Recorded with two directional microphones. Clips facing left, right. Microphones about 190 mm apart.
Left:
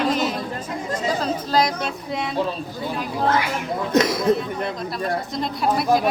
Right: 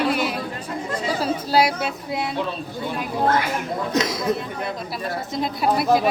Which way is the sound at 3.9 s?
55° left (ahead or behind).